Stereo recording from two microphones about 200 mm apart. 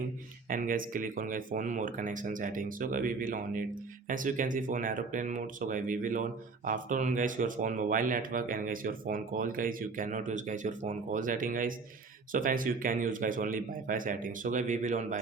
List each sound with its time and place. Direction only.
0.5 s speech: 45° right (ahead or behind)